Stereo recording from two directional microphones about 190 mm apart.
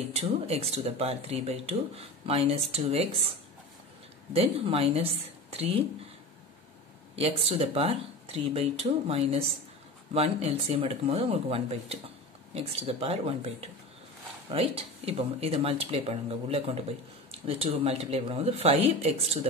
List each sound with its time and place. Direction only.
0.1 s speech: 35° right (ahead or behind)
7.2 s speech: 30° right (ahead or behind)